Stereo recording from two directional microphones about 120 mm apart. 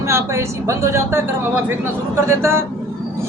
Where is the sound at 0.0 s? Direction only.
25° right (ahead or behind).